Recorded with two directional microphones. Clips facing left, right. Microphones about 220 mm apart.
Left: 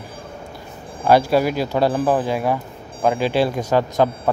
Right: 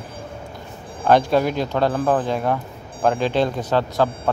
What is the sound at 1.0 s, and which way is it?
Speech, 5° left (ahead or behind).